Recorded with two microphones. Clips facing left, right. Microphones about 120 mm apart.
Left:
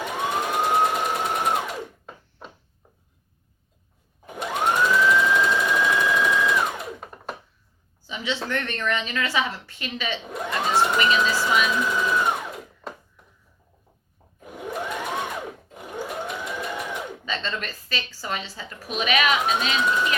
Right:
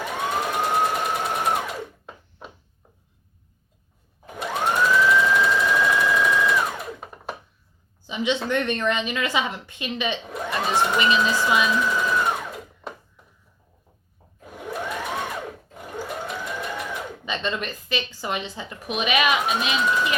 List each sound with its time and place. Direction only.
0.0 s emergency vehicle: centre (ahead or behind)
0.6 s sewing machine: centre (ahead or behind)
4.4 s sewing machine: centre (ahead or behind)
8.0 s a sound: 20° right (ahead or behind)
8.4 s a woman's voice: 20° right (ahead or behind)
11.7 s sewing machine: centre (ahead or behind)
14.4 s sewing machine: 5° left (ahead or behind)
17.2 s a woman's voice: 20° right (ahead or behind)